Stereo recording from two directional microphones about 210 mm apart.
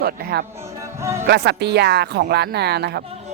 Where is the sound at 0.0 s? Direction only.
50° right (ahead or behind).